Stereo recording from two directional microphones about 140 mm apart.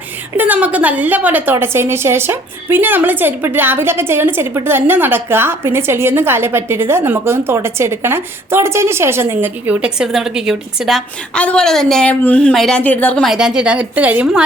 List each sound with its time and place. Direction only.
0.3 s a woman's voice: 10° right (ahead or behind); by 13.2 s 10° left (ahead or behind)
13.2 s a woman's voice: 5° right (ahead or behind)